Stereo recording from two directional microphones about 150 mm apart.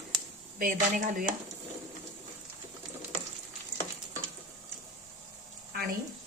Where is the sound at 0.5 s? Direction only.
60° right (ahead or behind).